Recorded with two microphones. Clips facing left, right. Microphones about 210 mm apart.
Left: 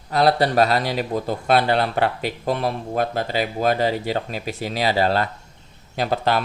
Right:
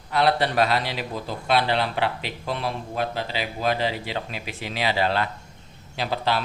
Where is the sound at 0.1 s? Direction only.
40° left (ahead or behind).